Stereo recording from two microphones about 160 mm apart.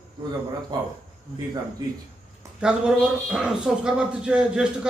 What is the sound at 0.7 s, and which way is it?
Speech, 25° right (ahead or behind).